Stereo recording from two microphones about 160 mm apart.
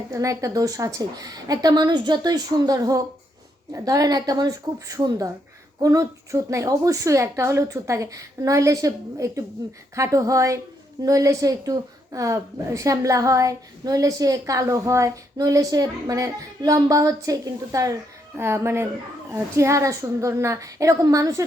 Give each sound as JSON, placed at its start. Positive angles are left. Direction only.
{"t": 0.1, "sound": "a woman's voice", "side_deg": -20}